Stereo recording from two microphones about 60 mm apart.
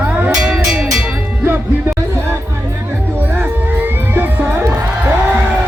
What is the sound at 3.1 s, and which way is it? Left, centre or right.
Music, right.